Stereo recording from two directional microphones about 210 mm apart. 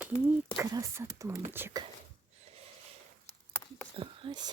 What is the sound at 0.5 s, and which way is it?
Speech, 15° right (ahead or behind).